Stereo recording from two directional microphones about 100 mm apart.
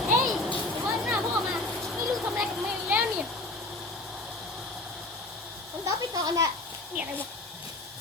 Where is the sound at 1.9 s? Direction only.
5° right (ahead or behind).